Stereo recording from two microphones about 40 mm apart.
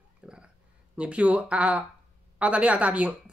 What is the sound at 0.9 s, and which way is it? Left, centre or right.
Speech, right.